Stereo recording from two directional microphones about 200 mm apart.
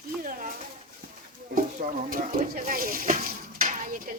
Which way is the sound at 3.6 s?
45° right (ahead or behind).